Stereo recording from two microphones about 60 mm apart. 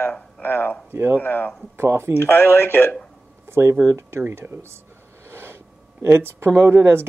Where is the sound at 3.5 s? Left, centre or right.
Right.